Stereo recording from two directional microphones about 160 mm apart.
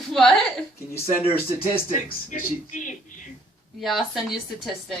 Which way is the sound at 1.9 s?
60° left (ahead or behind).